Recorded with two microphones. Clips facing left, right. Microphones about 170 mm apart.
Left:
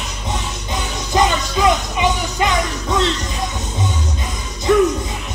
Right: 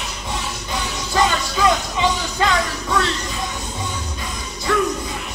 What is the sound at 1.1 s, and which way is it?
Music, 20° left (ahead or behind).